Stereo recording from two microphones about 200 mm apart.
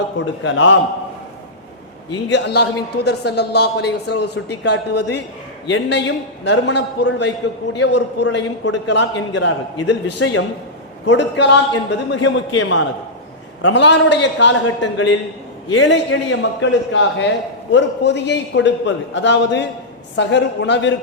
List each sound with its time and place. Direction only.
0.4 s a man's voice: 70° left (ahead or behind)
2.3 s a man's voice: 55° left (ahead or behind)
13.6 s a man's voice: 65° left (ahead or behind)